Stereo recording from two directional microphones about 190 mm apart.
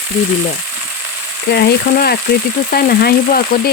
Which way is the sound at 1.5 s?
55° left (ahead or behind).